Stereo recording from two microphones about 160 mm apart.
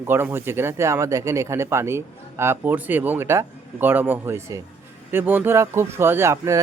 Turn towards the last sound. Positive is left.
turn(degrees=-20)  # may be behind; listen again after turning